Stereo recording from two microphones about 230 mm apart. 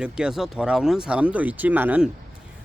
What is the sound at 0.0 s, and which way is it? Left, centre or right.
Speech, centre.